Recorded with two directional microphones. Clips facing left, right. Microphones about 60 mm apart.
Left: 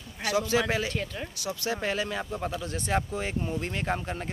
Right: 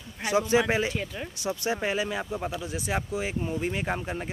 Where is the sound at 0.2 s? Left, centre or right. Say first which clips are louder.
Right 3 dB; right.